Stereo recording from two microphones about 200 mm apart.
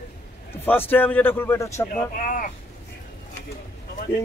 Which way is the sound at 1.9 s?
40° left (ahead or behind).